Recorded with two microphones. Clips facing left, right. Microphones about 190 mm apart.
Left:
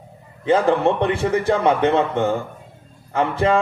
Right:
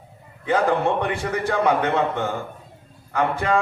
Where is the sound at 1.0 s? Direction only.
25° left (ahead or behind).